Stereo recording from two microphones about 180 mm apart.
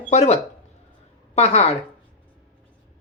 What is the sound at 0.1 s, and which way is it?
Speech, 35° left (ahead or behind).